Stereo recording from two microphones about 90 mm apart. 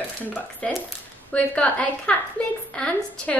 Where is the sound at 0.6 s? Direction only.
15° left (ahead or behind).